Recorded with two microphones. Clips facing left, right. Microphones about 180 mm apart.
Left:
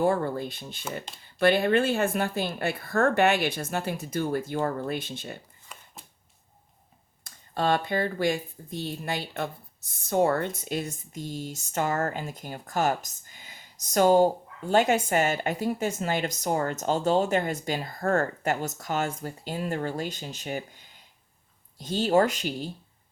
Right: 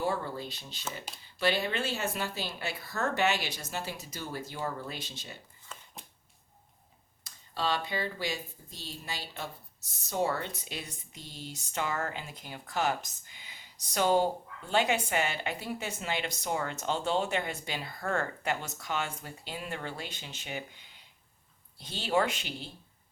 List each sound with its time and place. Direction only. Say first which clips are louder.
0.0 s speech: left 8 dB; 50° left (ahead or behind)
7.3 s speech: left 7 dB; 50° left (ahead or behind)